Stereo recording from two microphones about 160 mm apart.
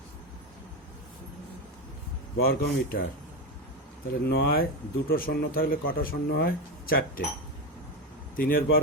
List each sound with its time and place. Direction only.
2.4 s a man's voice: 70° left (ahead or behind)
4.3 s a man's voice: 70° left (ahead or behind)
8.4 s speech: 65° left (ahead or behind)